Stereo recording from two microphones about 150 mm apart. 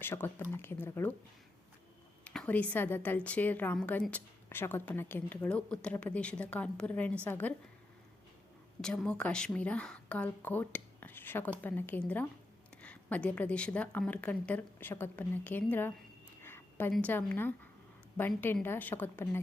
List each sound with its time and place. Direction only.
0.0 s a woman's voice: 15° left (ahead or behind)
2.2 s a woman's voice: 5° left (ahead or behind)
8.8 s a woman's voice: 5° left (ahead or behind)
16.4 s a sound: 15° left (ahead or behind)
16.9 s a woman's voice: 10° left (ahead or behind)